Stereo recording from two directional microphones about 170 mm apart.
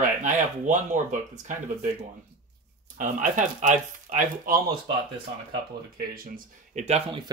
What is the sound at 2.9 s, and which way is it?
Speech, 50° right (ahead or behind).